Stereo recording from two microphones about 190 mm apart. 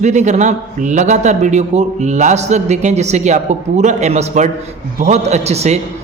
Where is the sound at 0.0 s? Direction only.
40° right (ahead or behind).